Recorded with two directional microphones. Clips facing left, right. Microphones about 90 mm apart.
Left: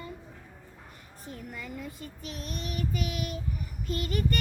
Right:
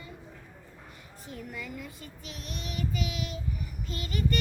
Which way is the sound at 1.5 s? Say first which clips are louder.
Even; 25° left (ahead or behind).